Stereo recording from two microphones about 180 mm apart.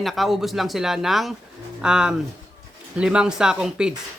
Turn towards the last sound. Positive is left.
turn(degrees=-5)  # may be behind; listen again after turning